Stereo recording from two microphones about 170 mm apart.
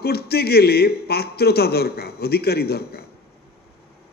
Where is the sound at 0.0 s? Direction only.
65° left (ahead or behind).